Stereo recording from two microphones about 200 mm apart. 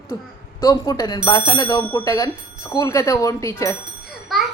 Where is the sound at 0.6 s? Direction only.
20° left (ahead or behind).